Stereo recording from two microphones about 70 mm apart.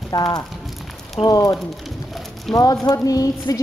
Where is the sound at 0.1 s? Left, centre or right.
Left.